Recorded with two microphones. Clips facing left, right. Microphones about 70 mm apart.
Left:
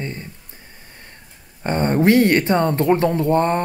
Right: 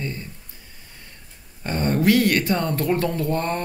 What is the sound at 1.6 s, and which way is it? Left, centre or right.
Speech, left.